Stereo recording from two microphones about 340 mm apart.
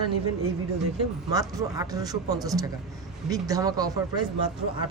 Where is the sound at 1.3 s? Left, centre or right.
Centre.